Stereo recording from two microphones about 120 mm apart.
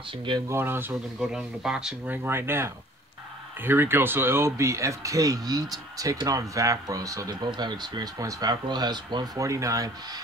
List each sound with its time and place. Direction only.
0.1 s speech: 45° right (ahead or behind)
0.5 s speech: 20° right (ahead or behind)
1.2 s speech: 5° right (ahead or behind)
2.0 s speech: 20° right (ahead or behind)